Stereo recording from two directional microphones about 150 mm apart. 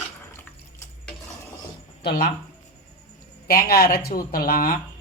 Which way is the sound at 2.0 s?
90° left.